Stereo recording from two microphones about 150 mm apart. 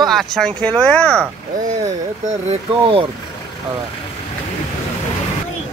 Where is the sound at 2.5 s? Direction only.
35° right (ahead or behind).